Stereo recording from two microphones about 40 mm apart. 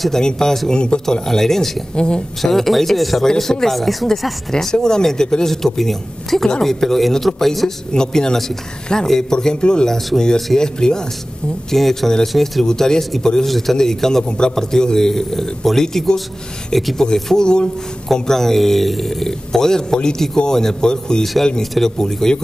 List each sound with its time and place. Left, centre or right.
0.2 s speech: centre
1.2 s speech: centre
2.0 s speech: left
2.4 s speech: centre
3.3 s speech: centre
9.8 s speech: centre
11.7 s speech: centre
12.6 s speech: centre
13.5 s speech: centre